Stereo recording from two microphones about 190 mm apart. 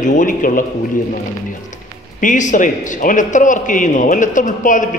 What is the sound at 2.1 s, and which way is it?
A man's voice, 40° left (ahead or behind).